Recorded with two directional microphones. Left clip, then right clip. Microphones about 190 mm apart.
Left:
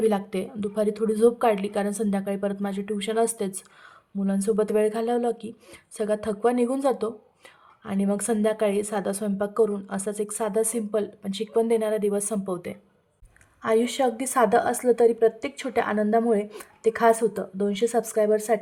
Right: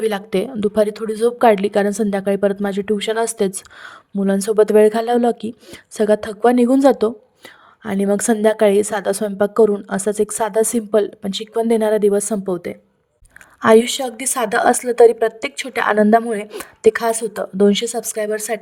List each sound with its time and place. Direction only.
0.0 s a woman's voice: 45° right (ahead or behind); by 12.7 s 30° right (ahead or behind)
13.6 s a woman's voice: 50° right (ahead or behind)